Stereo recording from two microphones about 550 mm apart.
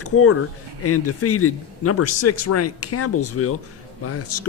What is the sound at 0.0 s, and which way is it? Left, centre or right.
Speech, left.